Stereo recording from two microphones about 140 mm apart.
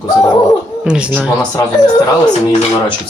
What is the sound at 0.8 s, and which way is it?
Speech, 5° right (ahead or behind).